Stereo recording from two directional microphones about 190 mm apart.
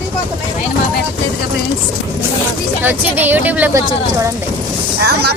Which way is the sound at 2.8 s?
10° right (ahead or behind).